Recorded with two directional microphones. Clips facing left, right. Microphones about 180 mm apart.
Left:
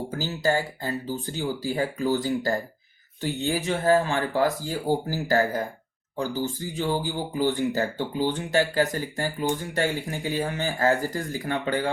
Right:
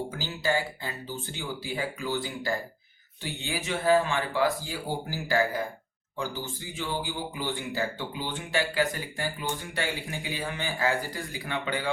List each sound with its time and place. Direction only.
0.1 s speech: 40° left (ahead or behind)